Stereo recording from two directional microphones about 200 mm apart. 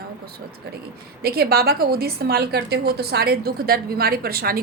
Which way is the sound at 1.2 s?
50° right (ahead or behind).